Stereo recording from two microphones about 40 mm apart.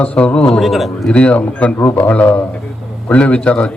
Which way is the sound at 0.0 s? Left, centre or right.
Left.